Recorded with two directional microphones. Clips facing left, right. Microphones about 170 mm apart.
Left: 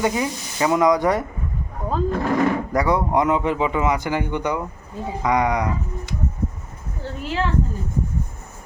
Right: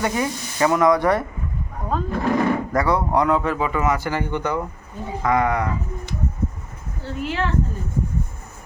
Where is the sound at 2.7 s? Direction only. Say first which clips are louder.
Even; 15° left (ahead or behind).